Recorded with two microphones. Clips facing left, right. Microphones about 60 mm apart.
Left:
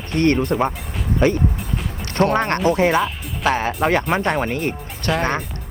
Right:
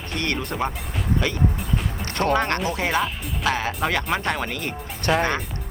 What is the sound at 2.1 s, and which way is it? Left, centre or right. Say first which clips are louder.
Speech: left 4 dB; left.